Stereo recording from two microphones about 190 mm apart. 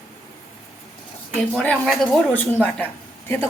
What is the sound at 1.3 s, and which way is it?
A woman's voice, 5° left (ahead or behind).